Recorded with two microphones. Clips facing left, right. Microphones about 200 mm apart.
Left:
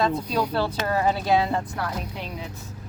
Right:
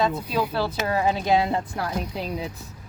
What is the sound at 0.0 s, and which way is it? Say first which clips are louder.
Speech: even; 5° right (ahead or behind).